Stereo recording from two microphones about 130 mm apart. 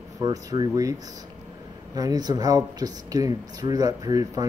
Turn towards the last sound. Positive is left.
turn(degrees=-30)  # may be behind; listen again after turning